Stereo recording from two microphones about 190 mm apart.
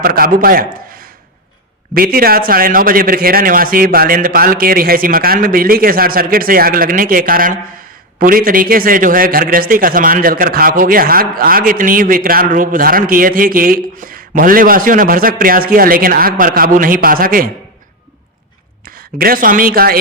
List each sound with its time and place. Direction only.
0.0 s a man's voice: 50° right (ahead or behind)
1.9 s a man's voice: 50° right (ahead or behind)
18.9 s a man's voice: 50° right (ahead or behind)